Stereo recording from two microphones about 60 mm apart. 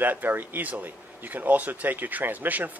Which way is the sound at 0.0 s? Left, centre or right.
Right.